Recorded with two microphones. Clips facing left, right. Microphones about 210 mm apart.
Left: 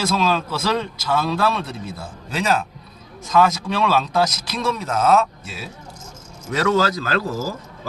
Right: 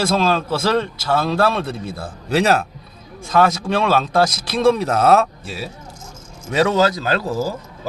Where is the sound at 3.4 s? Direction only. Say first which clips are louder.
Right 4 dB; 55° right (ahead or behind).